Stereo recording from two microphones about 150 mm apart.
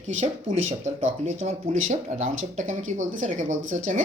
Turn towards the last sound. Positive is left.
turn(degrees=-60)  # may be behind; listen again after turning